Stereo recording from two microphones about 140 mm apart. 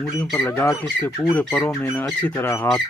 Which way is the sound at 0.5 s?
20° left (ahead or behind).